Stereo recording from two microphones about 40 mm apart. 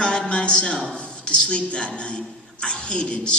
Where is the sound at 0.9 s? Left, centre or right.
Left.